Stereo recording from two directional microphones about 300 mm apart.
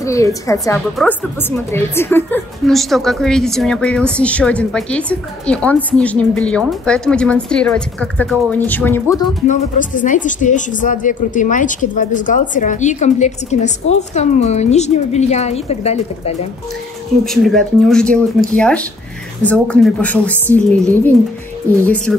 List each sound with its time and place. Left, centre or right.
0.0 s a woman's voice: centre
9.5 s a woman's voice: left
17.2 s a woman's voice: centre